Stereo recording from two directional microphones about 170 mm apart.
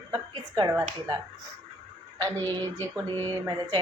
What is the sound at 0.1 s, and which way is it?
Speech, 25° right (ahead or behind).